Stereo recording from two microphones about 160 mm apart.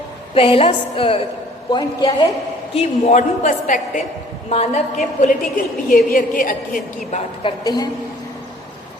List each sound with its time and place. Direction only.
0.3 s a woman's voice: 35° left (ahead or behind)
2.7 s a woman's voice: 45° left (ahead or behind)
7.4 s a woman's voice: 25° left (ahead or behind)